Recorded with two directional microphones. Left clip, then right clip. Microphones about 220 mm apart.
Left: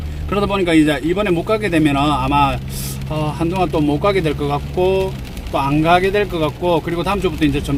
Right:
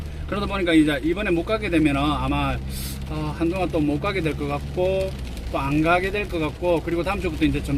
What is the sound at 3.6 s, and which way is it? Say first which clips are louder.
Speech: left 9 dB; 15° left (ahead or behind).